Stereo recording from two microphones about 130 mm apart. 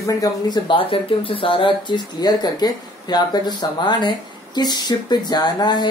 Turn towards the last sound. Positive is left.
turn(degrees=35)  # may be behind; listen again after turning